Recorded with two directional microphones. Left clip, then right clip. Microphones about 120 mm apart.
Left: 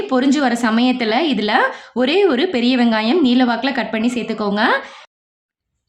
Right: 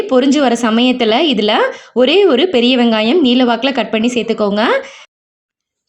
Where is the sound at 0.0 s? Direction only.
20° right (ahead or behind).